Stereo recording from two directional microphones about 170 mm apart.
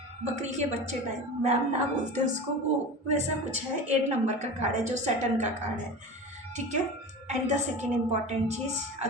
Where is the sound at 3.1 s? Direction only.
40° right (ahead or behind).